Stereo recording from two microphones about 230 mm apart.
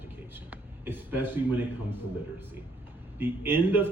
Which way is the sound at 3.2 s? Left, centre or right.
Centre.